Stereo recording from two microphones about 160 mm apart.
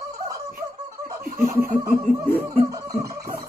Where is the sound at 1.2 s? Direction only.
70° right (ahead or behind).